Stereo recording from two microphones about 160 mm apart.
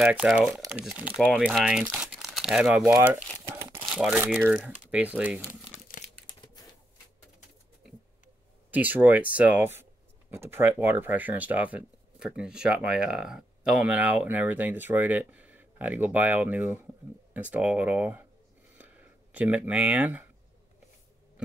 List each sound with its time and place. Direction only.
0.0 s speech: 5° right (ahead or behind)
3.4 s crumpling: 15° right (ahead or behind)
3.8 s speech: 5° right (ahead or behind)
5.5 s crumpling: 50° left (ahead or behind)
6.2 s crumpling: 25° left (ahead or behind)
8.7 s speech: 10° right (ahead or behind)
18.8 s a sound: 10° right (ahead or behind)